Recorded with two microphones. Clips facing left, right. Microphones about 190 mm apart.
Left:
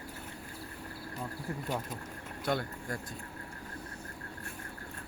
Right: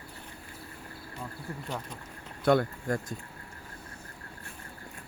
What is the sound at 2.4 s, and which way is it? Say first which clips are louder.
Speech: right 9 dB; 55° right (ahead or behind).